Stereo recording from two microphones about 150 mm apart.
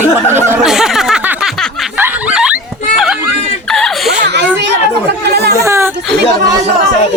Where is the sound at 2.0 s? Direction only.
10° right (ahead or behind).